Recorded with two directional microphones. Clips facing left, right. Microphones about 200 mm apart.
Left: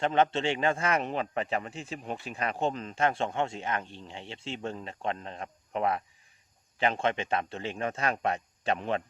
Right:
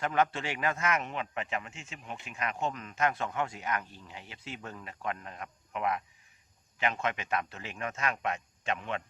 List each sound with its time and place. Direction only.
0.0 s speech: 25° left (ahead or behind)